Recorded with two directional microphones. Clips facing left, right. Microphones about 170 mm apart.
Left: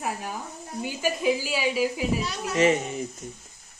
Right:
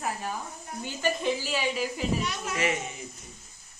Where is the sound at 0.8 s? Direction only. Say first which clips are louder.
Left 2 dB; 10° left (ahead or behind).